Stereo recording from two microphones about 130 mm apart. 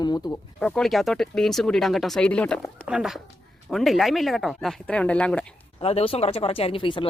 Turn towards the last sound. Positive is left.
turn(degrees=40)  # may be behind; listen again after turning